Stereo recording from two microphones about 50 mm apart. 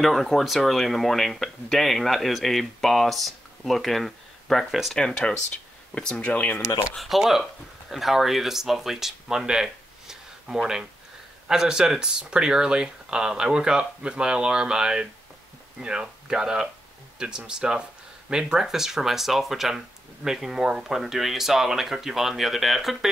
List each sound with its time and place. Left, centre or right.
0.0 s speech: centre
4.9 s speech: centre
6.3 s speech: left
7.0 s speech: centre